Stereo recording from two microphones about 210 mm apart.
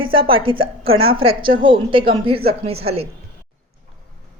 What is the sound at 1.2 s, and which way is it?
A woman's voice, 25° right (ahead or behind).